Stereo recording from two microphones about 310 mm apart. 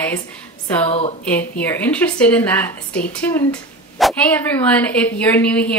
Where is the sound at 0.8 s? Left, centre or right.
Centre.